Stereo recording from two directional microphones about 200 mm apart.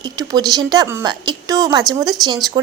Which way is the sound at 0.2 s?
20° right (ahead or behind).